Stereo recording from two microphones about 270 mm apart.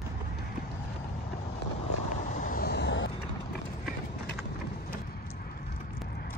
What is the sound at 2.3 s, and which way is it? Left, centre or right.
Vehicle, left.